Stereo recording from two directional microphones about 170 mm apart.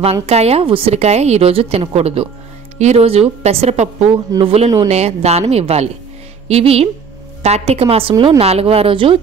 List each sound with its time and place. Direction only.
0.0 s a woman's voice: 40° right (ahead or behind)